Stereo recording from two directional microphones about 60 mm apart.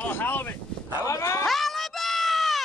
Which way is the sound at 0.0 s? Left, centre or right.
Left.